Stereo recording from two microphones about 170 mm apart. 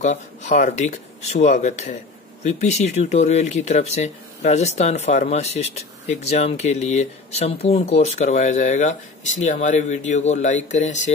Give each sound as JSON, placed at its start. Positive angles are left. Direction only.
{"t": 0.0, "sound": "speech", "side_deg": 45}